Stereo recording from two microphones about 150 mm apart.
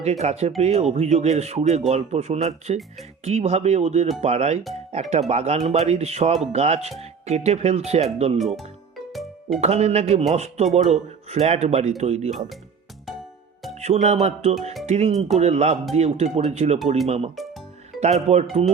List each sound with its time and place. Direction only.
0.0 s speech: 45° right (ahead or behind)
8.4 s speech: centre (ahead or behind)
9.6 s speech: 45° right (ahead or behind)
12.3 s speech: centre (ahead or behind)
13.7 s speech: 45° right (ahead or behind)
17.3 s music: centre (ahead or behind)
18.0 s speech: 45° right (ahead or behind)